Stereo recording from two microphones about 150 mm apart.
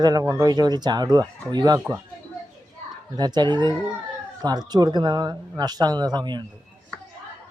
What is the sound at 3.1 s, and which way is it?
Speech, 30° right (ahead or behind).